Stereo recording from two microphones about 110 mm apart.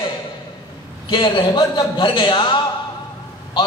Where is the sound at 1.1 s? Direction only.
45° left (ahead or behind).